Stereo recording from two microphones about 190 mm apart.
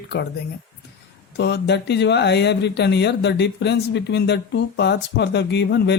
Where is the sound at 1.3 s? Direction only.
60° left (ahead or behind).